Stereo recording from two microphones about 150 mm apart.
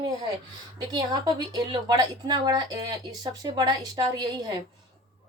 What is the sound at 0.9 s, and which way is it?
A woman's voice, 30° right (ahead or behind).